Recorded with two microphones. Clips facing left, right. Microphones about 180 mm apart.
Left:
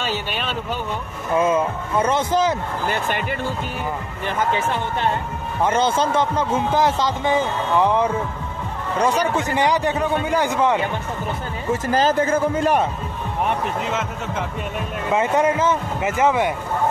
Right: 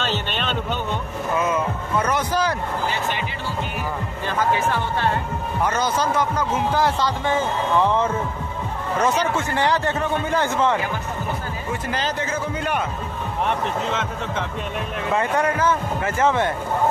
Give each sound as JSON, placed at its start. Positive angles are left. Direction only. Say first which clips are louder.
{"t": 0.0, "sound": "a sound", "louder": "even", "side_deg": 10}
{"t": 1.4, "sound": "speech", "louder": "left 6 dB", "side_deg": 25}
{"t": 2.9, "sound": "a man's voice", "louder": "left 2 dB", "side_deg": 55}
{"t": 4.4, "sound": "a man's voice", "louder": "right 1 dB", "side_deg": 20}
{"t": 11.7, "sound": "a man's voice", "louder": "left 8 dB", "side_deg": 40}
{"t": 15.1, "sound": "a man's voice", "louder": "left 3 dB", "side_deg": 20}